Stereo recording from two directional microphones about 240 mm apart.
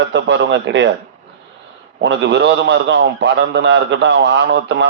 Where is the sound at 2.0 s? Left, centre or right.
Right.